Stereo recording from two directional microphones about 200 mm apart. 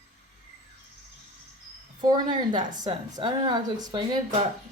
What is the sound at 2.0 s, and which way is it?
A woman's voice, 20° right (ahead or behind).